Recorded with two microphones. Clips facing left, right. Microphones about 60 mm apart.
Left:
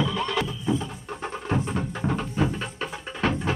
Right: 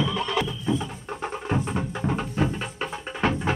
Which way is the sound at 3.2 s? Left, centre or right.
Centre.